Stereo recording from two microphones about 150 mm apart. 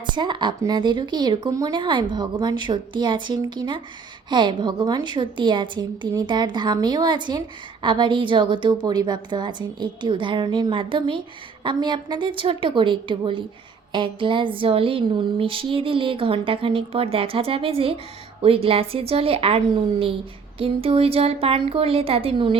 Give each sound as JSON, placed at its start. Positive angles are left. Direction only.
{"t": 0.0, "sound": "a woman's voice", "side_deg": -30}